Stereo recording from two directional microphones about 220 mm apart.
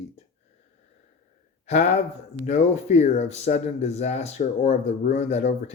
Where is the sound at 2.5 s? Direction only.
30° left (ahead or behind).